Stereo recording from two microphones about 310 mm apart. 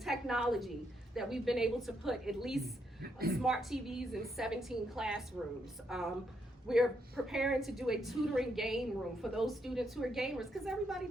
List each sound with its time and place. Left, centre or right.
0.0 s a woman's voice: centre
3.0 s speech: right
3.4 s a woman's voice: centre